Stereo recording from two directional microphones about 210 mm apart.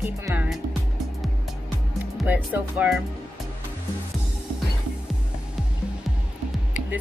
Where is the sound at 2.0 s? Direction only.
10° right (ahead or behind).